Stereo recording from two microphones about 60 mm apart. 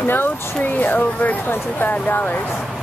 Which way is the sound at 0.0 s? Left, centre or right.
Left.